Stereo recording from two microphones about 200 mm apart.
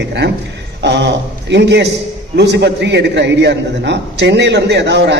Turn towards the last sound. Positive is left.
turn(degrees=-60)  # may be behind; listen again after turning